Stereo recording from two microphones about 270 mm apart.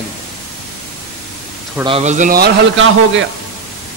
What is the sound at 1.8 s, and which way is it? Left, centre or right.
A man's voice, right.